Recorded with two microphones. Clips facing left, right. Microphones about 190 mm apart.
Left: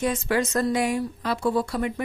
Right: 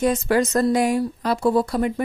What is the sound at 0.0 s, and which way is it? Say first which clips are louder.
Speech: right 5 dB; 40° right (ahead or behind).